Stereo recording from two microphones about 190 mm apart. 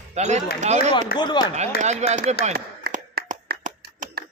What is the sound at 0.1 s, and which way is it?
Speech, 35° right (ahead or behind).